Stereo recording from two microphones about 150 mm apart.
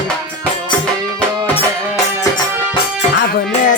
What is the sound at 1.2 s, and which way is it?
Music, 10° left (ahead or behind).